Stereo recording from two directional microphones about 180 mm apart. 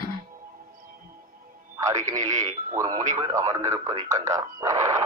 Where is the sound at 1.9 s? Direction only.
20° right (ahead or behind).